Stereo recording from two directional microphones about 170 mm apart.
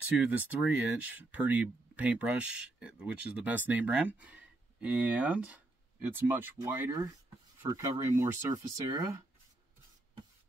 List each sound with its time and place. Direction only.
0.2 s speech: 10° right (ahead or behind)